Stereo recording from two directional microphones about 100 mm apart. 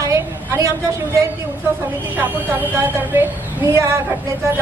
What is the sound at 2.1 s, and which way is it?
A woman's voice, 20° right (ahead or behind).